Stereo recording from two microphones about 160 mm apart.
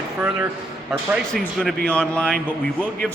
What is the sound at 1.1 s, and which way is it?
A man's voice, centre (ahead or behind).